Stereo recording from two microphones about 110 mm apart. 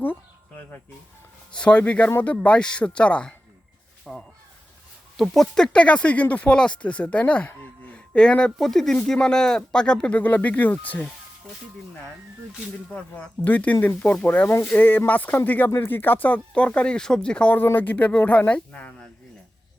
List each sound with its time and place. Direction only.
1.5 s speech: 10° left (ahead or behind)
4.0 s crow: centre (ahead or behind)
5.1 s speech: centre (ahead or behind)
13.4 s speech: 15° left (ahead or behind)